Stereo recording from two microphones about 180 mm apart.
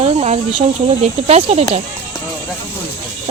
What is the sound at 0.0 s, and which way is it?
Speech, 35° right (ahead or behind).